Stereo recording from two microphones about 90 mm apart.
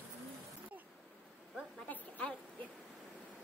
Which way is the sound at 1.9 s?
15° left (ahead or behind).